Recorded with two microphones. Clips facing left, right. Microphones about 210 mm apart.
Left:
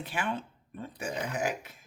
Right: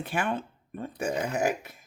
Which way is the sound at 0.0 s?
50° right (ahead or behind).